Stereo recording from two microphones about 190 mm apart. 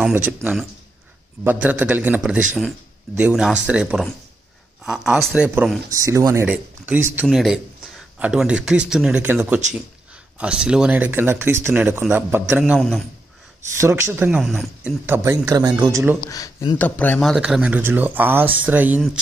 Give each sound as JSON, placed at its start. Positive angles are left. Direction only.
{"t": 0.0, "sound": "speech", "side_deg": -10}
{"t": 13.7, "sound": "speech", "side_deg": -15}
{"t": 14.4, "sound": "speech", "side_deg": 0}
{"t": 16.3, "sound": "speech", "side_deg": 20}
{"t": 17.2, "sound": "speech", "side_deg": 0}